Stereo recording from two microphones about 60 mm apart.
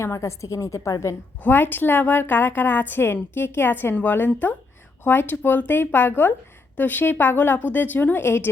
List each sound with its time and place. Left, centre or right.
0.0 s a woman's voice: left
1.4 s a woman's voice: left